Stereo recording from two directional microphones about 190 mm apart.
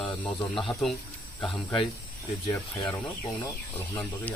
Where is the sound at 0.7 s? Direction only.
15° left (ahead or behind).